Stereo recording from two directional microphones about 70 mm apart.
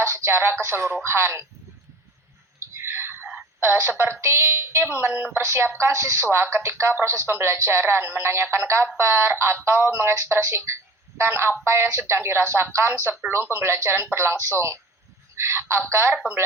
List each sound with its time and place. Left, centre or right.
0.0 s music: right
0.6 s speech: right
2.6 s a sound: right
3.6 s speech: right